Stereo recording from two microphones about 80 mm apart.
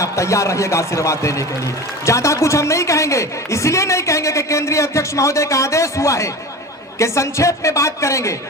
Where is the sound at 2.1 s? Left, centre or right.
Left.